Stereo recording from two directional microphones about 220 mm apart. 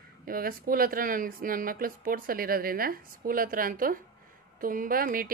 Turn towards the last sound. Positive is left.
turn(degrees=-40)  # may be behind; listen again after turning